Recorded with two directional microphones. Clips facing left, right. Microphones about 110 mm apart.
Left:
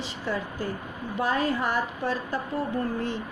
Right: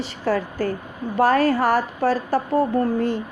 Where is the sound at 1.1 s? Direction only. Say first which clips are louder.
Right 9 dB; 75° right (ahead or behind).